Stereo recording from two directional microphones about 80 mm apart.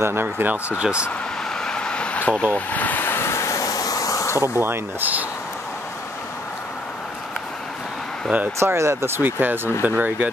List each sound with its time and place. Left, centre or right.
0.0 s speech: right
1.6 s a sound: centre; by 4.4 s left
4.4 s speech: right
8.5 s speech: right